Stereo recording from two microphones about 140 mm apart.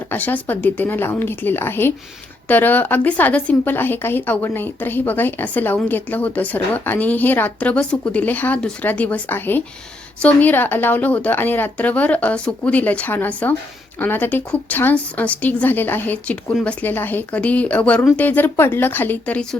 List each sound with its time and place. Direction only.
0.1 s speech: 15° left (ahead or behind)